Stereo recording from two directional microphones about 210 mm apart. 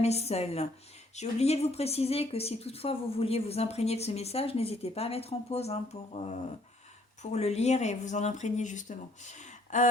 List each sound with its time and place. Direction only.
0.0 s speech: 30° left (ahead or behind)